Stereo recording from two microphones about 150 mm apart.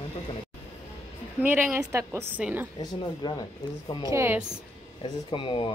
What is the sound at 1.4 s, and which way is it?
Speech, 15° right (ahead or behind).